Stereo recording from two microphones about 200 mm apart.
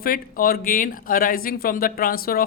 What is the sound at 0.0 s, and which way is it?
Speech, 45° left (ahead or behind).